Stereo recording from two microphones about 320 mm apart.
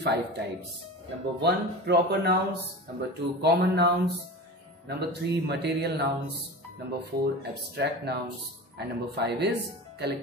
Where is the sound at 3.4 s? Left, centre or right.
Right.